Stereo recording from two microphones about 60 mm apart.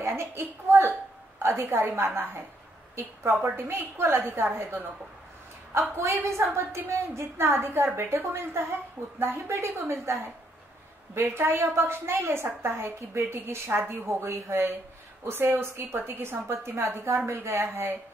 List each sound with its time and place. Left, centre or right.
0.0 s a woman's voice: right